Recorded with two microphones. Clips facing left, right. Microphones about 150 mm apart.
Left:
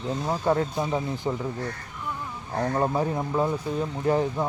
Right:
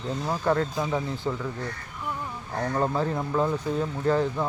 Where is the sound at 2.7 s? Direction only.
15° left (ahead or behind).